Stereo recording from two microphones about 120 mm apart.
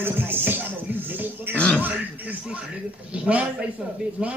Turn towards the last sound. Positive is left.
turn(degrees=-10)  # may be behind; listen again after turning